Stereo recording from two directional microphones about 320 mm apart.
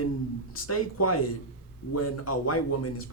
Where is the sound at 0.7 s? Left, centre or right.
Left.